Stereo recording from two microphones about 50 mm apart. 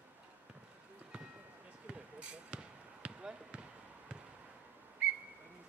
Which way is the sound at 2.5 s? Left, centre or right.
Right.